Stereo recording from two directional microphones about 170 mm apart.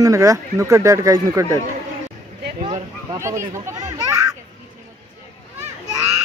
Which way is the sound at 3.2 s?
15° right (ahead or behind).